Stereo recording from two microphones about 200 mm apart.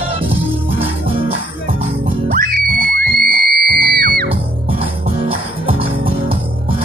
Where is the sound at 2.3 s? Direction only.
45° right (ahead or behind).